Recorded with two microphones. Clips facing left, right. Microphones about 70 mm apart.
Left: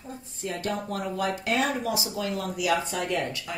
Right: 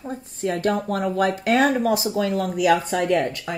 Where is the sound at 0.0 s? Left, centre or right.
Right.